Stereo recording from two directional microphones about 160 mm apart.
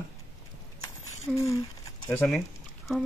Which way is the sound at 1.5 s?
20° left (ahead or behind).